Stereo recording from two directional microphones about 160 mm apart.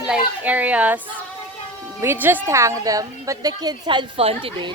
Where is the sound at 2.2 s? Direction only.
15° right (ahead or behind).